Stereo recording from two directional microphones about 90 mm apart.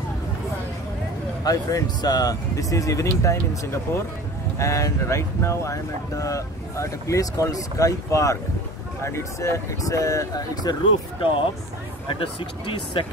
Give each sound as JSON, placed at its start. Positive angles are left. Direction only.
{"t": 1.4, "sound": "speech", "side_deg": 45}
{"t": 12.1, "sound": "speech", "side_deg": 80}